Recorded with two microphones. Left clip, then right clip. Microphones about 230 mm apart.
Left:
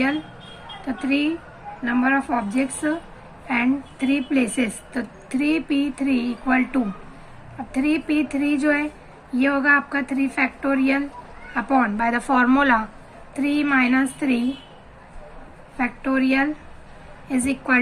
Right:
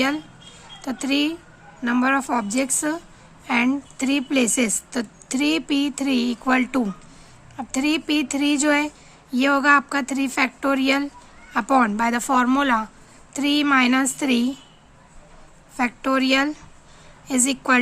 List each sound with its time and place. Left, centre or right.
0.8 s speech: right
13.3 s speech: right
15.8 s speech: right